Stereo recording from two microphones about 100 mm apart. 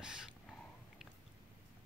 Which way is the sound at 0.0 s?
5° right (ahead or behind).